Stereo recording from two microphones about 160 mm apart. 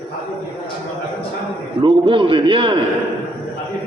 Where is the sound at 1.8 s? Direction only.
30° right (ahead or behind).